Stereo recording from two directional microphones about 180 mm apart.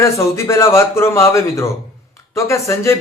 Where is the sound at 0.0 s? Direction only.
15° left (ahead or behind).